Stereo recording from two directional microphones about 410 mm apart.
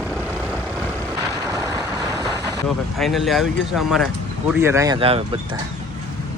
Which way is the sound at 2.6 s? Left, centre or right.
Centre.